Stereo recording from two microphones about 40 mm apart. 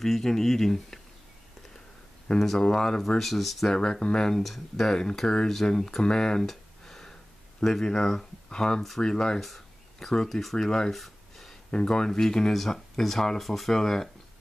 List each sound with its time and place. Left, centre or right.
0.0 s speech: centre
2.3 s speech: centre
2.6 s speech: centre
3.2 s speech: centre
3.7 s speech: centre
4.4 s speech: centre
6.0 s speech: centre
6.4 s a sound: centre
7.6 s speech: centre
8.5 s speech: left
10.9 s a sound: centre
11.7 s speech: centre